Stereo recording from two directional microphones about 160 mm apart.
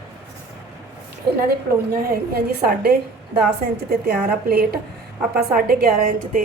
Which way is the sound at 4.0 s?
75° right (ahead or behind).